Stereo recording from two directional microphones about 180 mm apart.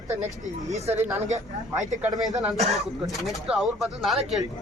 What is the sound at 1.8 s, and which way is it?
Speech, 15° right (ahead or behind).